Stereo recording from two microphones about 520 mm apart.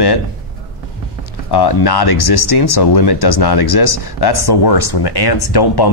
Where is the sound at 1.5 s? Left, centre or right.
Left.